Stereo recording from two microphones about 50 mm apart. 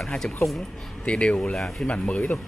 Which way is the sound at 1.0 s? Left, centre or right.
Left.